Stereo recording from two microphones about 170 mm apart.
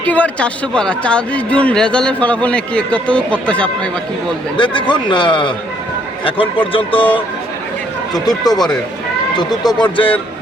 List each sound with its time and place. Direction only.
0.0 s a man's voice: 10° left (ahead or behind)
4.5 s a man's voice: 30° left (ahead or behind)
8.1 s a man's voice: 25° left (ahead or behind)